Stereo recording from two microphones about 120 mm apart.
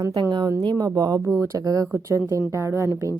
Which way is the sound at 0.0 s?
35° right (ahead or behind).